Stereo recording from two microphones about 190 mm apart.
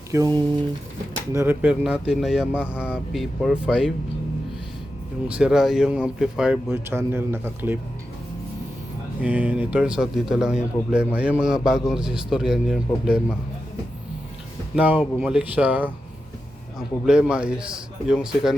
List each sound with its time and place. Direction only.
0.1 s a man's voice: 20° right (ahead or behind); by 3.9 s centre (ahead or behind)
5.3 s a man's voice: 5° right (ahead or behind)
9.2 s a man's voice: 5° right (ahead or behind)
14.8 s a man's voice: 10° right (ahead or behind)